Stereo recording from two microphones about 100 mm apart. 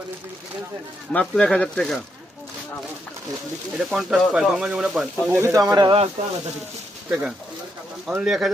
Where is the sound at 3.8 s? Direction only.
5° right (ahead or behind).